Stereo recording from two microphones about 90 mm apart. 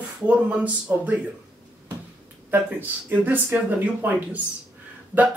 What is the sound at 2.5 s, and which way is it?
Speech, 20° right (ahead or behind).